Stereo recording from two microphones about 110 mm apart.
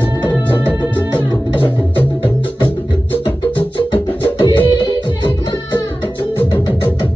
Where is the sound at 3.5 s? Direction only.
50° left (ahead or behind).